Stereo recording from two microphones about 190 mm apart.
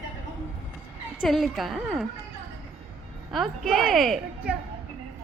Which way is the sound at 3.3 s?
Centre (ahead or behind).